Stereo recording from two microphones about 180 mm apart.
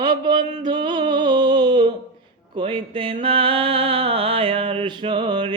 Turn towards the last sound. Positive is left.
turn(degrees=-25)  # may be behind; listen again after turning